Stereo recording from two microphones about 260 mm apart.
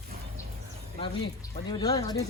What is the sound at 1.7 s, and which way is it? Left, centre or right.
Speech, centre.